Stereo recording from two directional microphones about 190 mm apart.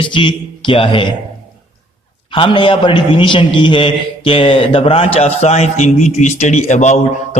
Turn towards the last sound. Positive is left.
turn(degrees=40)  # may be behind; listen again after turning